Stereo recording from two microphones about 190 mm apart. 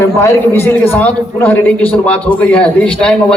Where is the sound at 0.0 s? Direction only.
15° left (ahead or behind).